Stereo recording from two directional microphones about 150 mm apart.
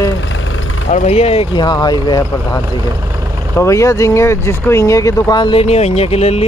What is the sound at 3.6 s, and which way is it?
Speech, 20° left (ahead or behind).